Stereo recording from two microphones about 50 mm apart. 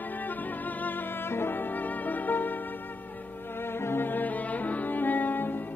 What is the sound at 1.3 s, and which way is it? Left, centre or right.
Music, left.